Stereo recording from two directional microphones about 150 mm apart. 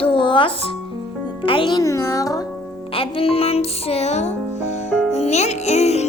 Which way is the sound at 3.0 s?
40° left (ahead or behind).